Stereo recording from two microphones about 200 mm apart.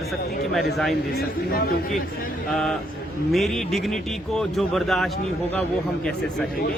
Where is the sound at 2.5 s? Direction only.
5° left (ahead or behind).